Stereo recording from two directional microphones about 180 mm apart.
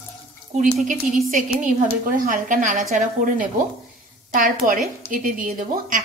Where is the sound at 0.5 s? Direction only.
45° right (ahead or behind).